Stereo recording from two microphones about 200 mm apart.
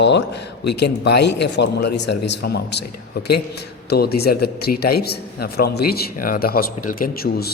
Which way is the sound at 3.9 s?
50° left (ahead or behind).